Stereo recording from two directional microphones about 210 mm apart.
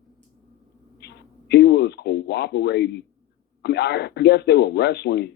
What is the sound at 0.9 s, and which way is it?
Speech, 50° left (ahead or behind).